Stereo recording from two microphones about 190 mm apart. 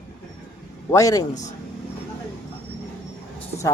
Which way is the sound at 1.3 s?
40° left (ahead or behind).